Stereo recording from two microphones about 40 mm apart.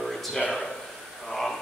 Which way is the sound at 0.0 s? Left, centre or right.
Centre.